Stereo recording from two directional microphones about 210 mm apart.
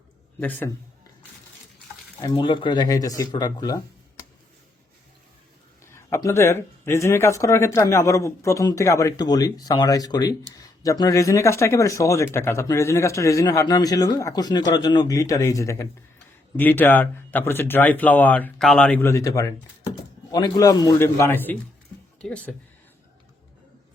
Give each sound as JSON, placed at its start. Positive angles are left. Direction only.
{"t": 0.3, "sound": "speech", "side_deg": 10}
{"t": 2.2, "sound": "speech", "side_deg": 25}
{"t": 5.8, "sound": "speech", "side_deg": 10}